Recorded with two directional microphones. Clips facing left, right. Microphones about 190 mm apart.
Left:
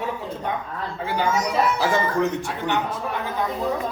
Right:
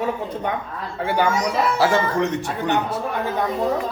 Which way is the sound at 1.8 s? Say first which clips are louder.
Right 3 dB; 70° right (ahead or behind).